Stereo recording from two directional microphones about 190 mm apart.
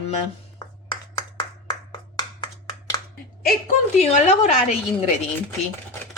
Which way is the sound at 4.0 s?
35° left (ahead or behind).